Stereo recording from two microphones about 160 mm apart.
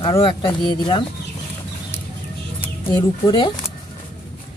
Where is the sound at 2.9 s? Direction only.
30° left (ahead or behind).